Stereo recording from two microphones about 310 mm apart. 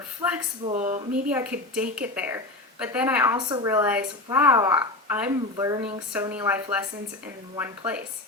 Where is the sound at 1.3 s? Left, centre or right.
Centre.